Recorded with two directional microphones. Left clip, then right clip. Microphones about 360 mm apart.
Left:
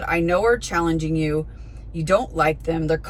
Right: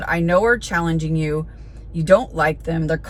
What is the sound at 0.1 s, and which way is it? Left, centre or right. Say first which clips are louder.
Speech: right 2 dB; centre.